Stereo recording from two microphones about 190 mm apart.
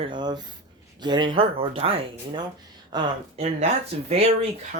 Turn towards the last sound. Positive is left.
turn(degrees=-30)  # may be behind; listen again after turning